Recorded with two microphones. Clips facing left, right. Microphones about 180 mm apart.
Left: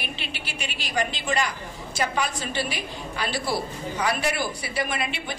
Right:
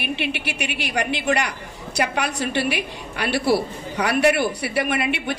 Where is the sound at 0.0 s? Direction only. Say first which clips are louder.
Right 9 dB; 65° right (ahead or behind).